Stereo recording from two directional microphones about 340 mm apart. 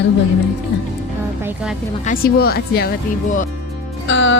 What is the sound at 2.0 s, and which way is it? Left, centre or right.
Speech, left.